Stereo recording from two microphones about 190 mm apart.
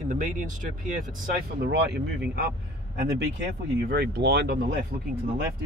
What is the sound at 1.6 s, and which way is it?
Speech, 60° right (ahead or behind).